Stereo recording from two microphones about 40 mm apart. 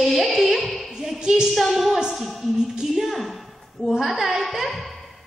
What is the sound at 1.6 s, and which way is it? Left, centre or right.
Speech, centre.